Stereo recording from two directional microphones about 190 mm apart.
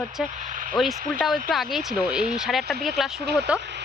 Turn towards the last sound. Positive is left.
turn(degrees=-60)  # may be behind; listen again after turning